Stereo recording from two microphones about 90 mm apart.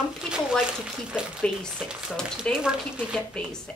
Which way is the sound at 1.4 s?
10° left (ahead or behind).